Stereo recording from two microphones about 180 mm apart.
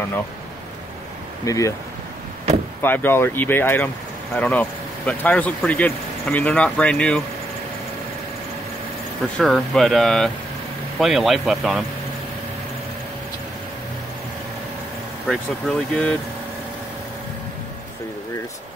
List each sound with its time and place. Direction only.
1.4 s speech: 20° left (ahead or behind)
2.8 s speech: 10° left (ahead or behind)
9.4 s speech: centre (ahead or behind)
15.2 s speech: 5° left (ahead or behind)